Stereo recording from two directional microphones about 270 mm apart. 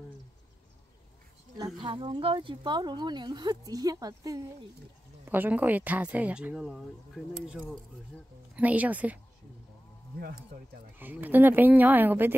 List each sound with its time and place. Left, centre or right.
1.8 s speech: centre
11.0 s speech: centre